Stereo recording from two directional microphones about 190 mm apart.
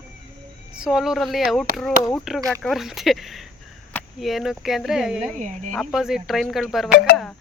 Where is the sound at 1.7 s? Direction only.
50° right (ahead or behind).